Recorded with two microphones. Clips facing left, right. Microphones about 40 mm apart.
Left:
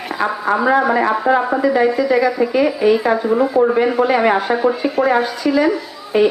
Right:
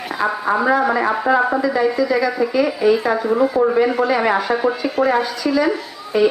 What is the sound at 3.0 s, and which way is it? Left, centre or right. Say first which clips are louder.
Speech: left 2 dB; centre.